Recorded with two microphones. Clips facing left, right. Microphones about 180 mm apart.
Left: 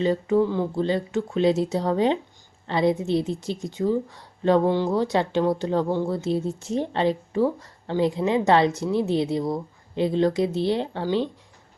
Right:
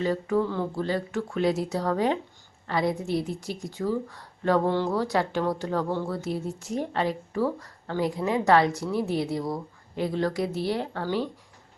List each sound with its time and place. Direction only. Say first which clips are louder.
0.0 s a woman's voice: left 4 dB; 20° left (ahead or behind)